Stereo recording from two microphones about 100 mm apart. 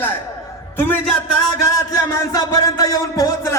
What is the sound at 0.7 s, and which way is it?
Speech, 20° left (ahead or behind).